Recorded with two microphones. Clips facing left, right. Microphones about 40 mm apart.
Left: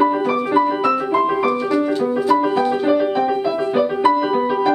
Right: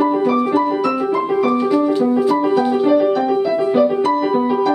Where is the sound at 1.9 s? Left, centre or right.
Centre.